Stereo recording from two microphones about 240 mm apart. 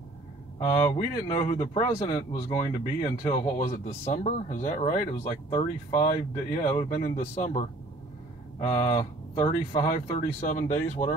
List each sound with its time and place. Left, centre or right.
1.2 s speech: centre
8.6 s speech: centre